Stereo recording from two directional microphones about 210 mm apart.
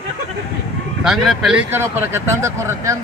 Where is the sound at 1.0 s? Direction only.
Centre (ahead or behind).